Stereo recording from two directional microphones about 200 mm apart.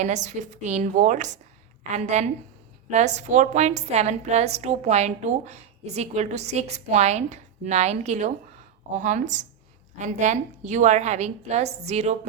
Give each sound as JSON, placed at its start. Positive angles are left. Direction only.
{"t": 0.0, "sound": "a woman's voice", "side_deg": -35}